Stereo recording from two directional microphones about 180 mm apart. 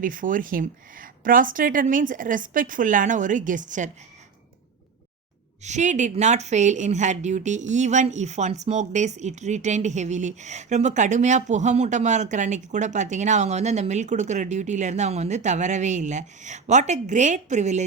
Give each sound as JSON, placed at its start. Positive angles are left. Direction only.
{"t": 0.0, "sound": "speech", "side_deg": -50}
{"t": 5.6, "sound": "a woman's voice", "side_deg": -40}